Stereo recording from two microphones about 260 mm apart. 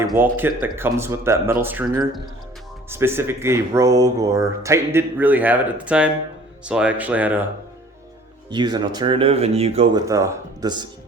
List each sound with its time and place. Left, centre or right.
0.2 s speech: centre
8.4 s speech: centre